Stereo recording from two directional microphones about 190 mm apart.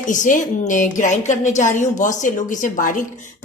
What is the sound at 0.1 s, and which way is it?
A woman's voice, 40° left (ahead or behind).